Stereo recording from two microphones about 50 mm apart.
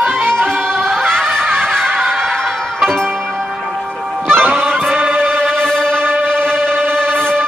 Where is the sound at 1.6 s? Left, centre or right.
Centre.